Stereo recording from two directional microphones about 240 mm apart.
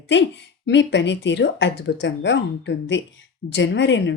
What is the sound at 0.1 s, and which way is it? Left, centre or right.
Speech, left.